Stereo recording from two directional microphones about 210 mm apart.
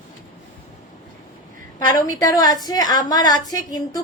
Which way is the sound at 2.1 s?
20° left (ahead or behind).